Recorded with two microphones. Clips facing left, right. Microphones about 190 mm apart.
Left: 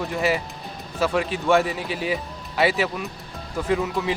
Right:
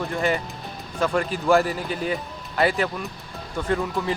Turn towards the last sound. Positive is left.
turn(degrees=5)  # may be behind; listen again after turning